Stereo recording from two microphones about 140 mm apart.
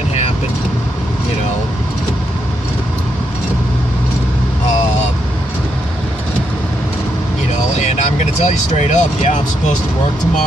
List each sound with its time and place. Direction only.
7.8 s speech: 55° left (ahead or behind)